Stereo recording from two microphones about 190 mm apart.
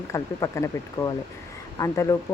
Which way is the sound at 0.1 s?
15° left (ahead or behind).